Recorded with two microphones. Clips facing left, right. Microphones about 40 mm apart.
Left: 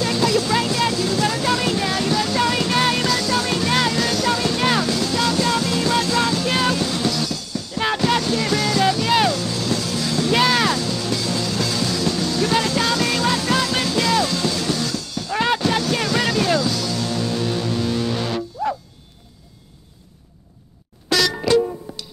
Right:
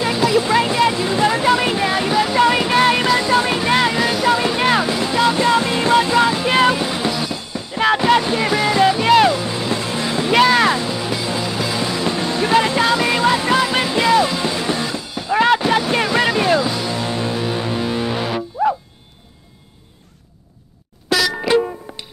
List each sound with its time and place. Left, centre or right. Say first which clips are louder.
0.0 s vehicle: right 3 dB; centre
10.4 s music: right 6 dB; centre
10.7 s music: right 2 dB; right
21.1 s music: right 2 dB; centre
21.9 s music: right 1 dB; right